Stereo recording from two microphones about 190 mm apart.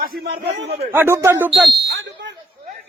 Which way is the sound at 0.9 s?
10° right (ahead or behind).